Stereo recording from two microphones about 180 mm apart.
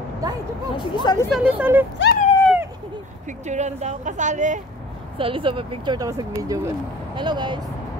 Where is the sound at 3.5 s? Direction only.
40° right (ahead or behind).